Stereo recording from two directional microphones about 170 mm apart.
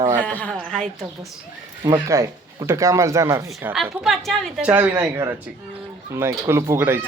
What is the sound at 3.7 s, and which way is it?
Speech, 5° right (ahead or behind).